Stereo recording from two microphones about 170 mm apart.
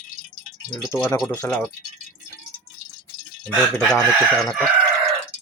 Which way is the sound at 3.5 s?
Centre (ahead or behind).